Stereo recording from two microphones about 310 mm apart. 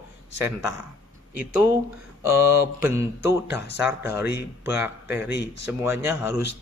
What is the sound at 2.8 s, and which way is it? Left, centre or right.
A man's voice, centre.